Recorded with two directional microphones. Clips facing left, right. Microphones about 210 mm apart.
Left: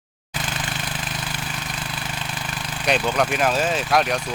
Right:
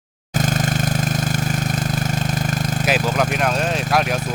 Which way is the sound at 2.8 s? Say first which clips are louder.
Even; 5° right (ahead or behind).